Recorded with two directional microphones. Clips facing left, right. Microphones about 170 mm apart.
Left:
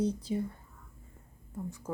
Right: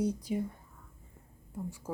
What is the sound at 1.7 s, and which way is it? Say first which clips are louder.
Speech: left 1 dB; 10° right (ahead or behind).